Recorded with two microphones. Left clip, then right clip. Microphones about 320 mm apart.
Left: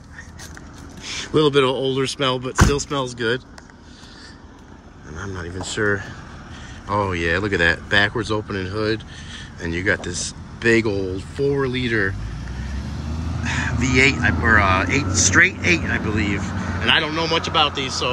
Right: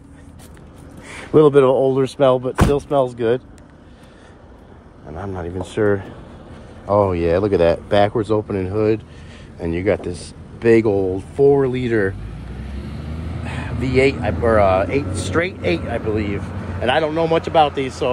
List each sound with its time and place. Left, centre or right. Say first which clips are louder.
1.1 s speech: right 5 dB; centre
5.1 s speech: right 4 dB; centre
13.4 s speech: left 5 dB; centre